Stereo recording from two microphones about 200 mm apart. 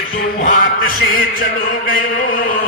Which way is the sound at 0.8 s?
45° left (ahead or behind).